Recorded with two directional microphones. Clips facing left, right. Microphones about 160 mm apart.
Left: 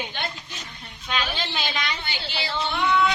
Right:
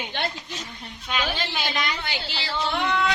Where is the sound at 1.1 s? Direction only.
5° right (ahead or behind).